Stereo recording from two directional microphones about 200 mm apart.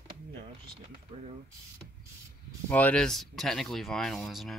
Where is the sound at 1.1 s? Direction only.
30° right (ahead or behind).